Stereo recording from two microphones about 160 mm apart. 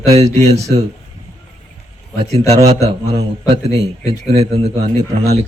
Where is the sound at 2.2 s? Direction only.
40° right (ahead or behind).